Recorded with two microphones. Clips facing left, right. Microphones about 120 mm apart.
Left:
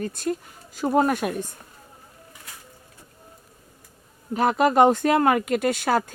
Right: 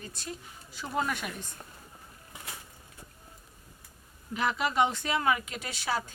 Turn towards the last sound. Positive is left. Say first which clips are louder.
# left 11 dB
turn(degrees=55)  # may be behind; listen again after turning